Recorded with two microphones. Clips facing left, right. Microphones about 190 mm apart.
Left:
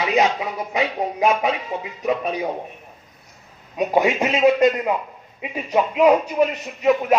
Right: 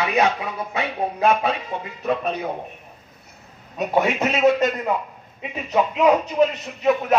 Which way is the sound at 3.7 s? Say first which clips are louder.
Left 2 dB; 10° left (ahead or behind).